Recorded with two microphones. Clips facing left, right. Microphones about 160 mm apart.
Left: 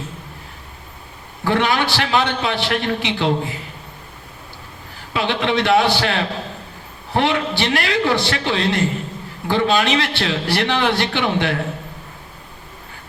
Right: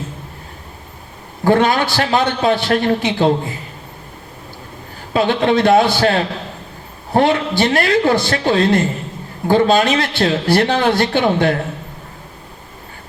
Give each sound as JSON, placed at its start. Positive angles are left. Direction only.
{"t": 1.5, "sound": "a man's voice", "side_deg": -45}
{"t": 5.1, "sound": "a man's voice", "side_deg": -45}